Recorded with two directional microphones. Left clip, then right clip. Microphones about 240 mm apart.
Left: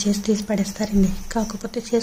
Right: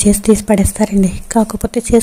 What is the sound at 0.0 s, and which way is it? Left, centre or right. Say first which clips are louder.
A woman's voice: right 10 dB; right.